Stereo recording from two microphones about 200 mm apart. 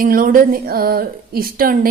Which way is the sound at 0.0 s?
45° right (ahead or behind).